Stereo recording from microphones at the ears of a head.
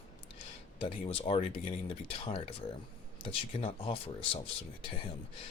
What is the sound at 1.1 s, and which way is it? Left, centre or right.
Speech, left.